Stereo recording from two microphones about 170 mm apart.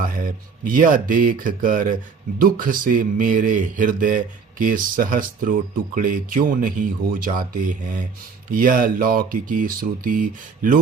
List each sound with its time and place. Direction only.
0.0 s speech: 55° right (ahead or behind)